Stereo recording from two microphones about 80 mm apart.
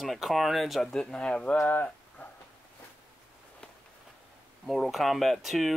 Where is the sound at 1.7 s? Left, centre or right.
Centre.